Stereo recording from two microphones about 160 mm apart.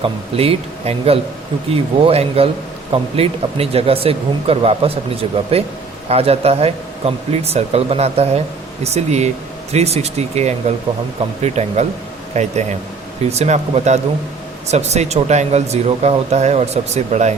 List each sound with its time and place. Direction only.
0.3 s speech: 40° right (ahead or behind)